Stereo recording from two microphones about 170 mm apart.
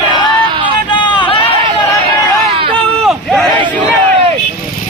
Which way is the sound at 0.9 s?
30° left (ahead or behind).